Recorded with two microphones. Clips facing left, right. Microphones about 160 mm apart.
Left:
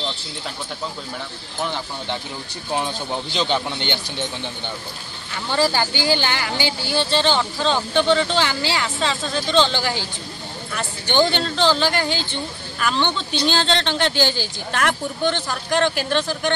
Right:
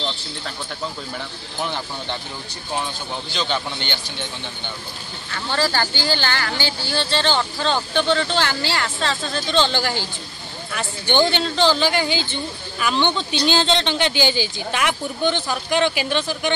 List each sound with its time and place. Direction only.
3.3 s a man's voice: 20° left (ahead or behind)
5.3 s speech: 15° left (ahead or behind); by 16.5 s 5° right (ahead or behind)